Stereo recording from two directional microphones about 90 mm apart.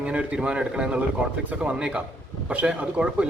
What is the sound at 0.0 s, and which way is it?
A man's voice, 15° right (ahead or behind).